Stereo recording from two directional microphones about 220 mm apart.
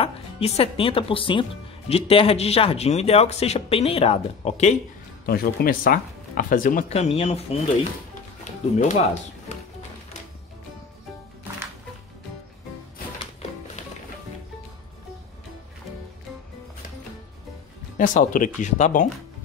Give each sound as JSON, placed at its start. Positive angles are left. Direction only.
{"t": 0.0, "sound": "speech", "side_deg": 25}
{"t": 5.2, "sound": "speech", "side_deg": 45}
{"t": 8.7, "sound": "speech", "side_deg": 35}
{"t": 17.9, "sound": "speech", "side_deg": 35}